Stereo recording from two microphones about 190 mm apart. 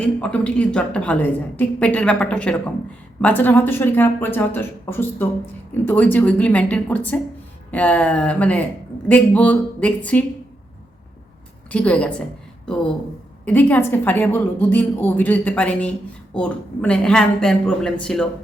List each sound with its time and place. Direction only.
0.0 s a woman's voice: 5° left (ahead or behind)
11.7 s a woman's voice: 5° left (ahead or behind)
13.4 s a woman's voice: 10° left (ahead or behind)